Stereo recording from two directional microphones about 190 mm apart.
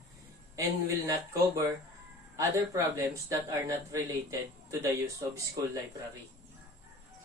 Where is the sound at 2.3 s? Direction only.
15° right (ahead or behind).